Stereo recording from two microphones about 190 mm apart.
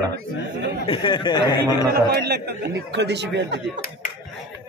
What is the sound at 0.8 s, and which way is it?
Speech, 25° left (ahead or behind).